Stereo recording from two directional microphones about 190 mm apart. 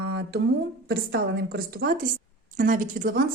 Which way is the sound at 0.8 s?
55° right (ahead or behind).